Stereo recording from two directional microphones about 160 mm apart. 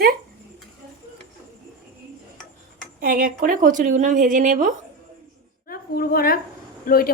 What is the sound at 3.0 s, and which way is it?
A woman's voice, 60° right (ahead or behind).